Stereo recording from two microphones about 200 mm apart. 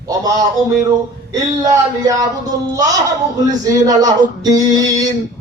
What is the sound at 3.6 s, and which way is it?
Speech, 15° right (ahead or behind).